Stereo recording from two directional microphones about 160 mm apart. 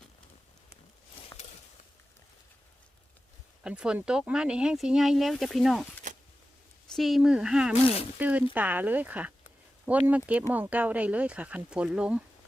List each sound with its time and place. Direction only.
1.3 s a sound: 15° left (ahead or behind)
3.6 s speech: 5° right (ahead or behind)
6.9 s speech: centre (ahead or behind)